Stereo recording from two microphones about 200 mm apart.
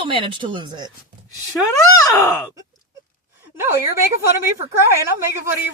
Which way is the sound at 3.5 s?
10° right (ahead or behind).